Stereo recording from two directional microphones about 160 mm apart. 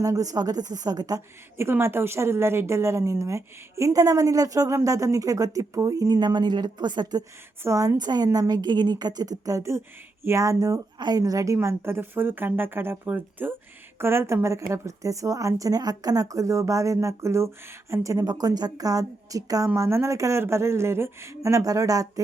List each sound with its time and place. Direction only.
0.0 s a woman's voice: 20° right (ahead or behind)